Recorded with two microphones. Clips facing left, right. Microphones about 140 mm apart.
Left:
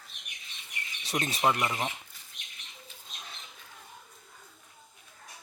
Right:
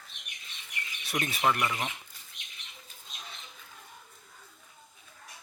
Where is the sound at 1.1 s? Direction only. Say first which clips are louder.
Left 1 dB; 20° left (ahead or behind).